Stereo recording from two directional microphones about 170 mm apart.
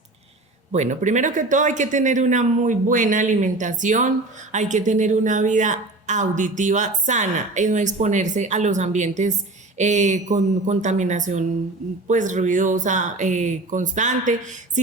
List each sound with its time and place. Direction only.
0.7 s a woman's voice: 45° right (ahead or behind)